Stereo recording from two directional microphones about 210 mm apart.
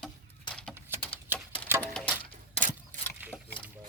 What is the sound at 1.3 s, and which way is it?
Typewriter, 10° right (ahead or behind).